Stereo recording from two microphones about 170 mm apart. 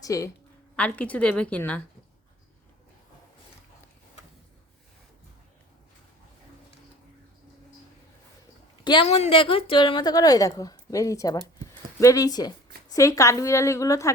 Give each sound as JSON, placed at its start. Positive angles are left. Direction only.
{"t": 0.0, "sound": "a woman's voice", "side_deg": 20}
{"t": 0.8, "sound": "a woman's voice", "side_deg": 10}
{"t": 8.8, "sound": "a woman's voice", "side_deg": 30}